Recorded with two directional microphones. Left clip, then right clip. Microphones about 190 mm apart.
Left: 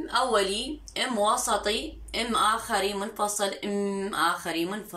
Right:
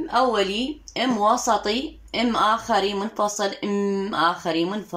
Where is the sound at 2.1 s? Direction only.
40° right (ahead or behind).